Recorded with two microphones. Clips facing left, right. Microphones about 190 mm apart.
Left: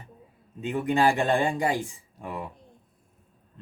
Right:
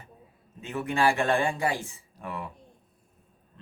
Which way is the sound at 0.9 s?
20° left (ahead or behind).